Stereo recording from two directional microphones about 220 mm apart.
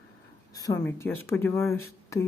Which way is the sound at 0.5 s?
15° left (ahead or behind).